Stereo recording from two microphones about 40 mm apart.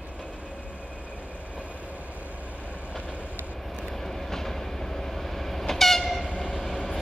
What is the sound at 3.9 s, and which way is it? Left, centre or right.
Train, centre.